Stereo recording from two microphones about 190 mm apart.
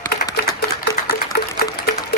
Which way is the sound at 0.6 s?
55° left (ahead or behind).